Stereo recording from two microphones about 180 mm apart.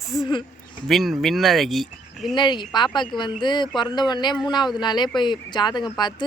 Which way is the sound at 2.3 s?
25° left (ahead or behind).